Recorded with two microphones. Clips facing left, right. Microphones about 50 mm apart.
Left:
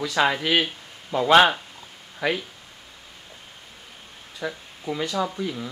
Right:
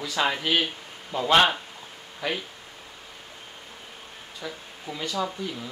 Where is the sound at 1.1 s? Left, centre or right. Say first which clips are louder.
Left 4 dB; centre.